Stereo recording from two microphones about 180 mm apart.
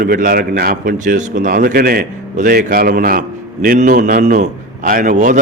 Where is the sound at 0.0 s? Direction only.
50° right (ahead or behind).